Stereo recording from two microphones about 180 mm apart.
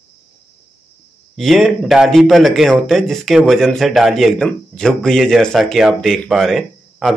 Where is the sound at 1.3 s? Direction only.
Centre (ahead or behind).